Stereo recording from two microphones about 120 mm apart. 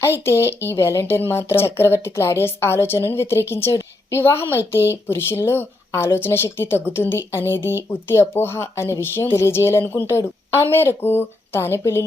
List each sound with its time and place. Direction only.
0.0 s a woman's voice: 20° left (ahead or behind)